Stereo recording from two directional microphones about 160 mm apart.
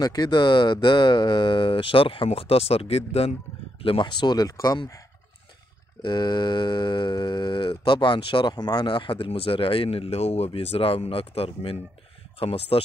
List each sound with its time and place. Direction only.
0.0 s speech: 25° left (ahead or behind)
6.0 s speech: 30° left (ahead or behind)